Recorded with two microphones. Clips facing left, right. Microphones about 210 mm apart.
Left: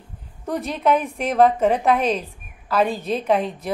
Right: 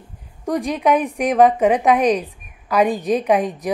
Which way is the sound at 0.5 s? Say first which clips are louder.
Right 3 dB; 15° right (ahead or behind).